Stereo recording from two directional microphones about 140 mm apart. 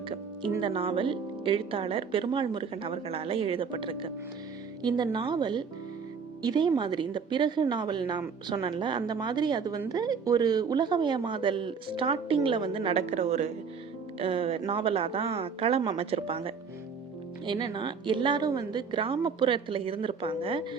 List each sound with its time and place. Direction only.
0.6 s speech: 40° right (ahead or behind)
14.2 s a woman's voice: 40° right (ahead or behind)